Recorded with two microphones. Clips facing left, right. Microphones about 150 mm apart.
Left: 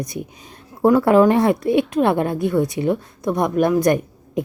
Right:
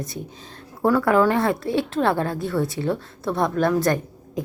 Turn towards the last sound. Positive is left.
turn(degrees=20)  # may be behind; listen again after turning